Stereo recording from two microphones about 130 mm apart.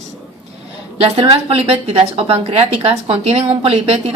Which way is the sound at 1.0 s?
45° right (ahead or behind).